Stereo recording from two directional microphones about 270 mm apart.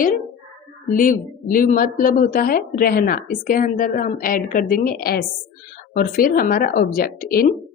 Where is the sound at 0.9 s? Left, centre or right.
Left.